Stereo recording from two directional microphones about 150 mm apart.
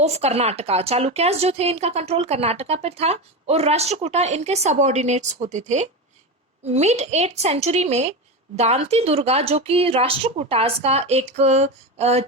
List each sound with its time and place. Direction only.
0.0 s a woman's voice: 45° right (ahead or behind)